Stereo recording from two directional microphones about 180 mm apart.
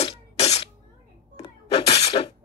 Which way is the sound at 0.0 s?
35° left (ahead or behind).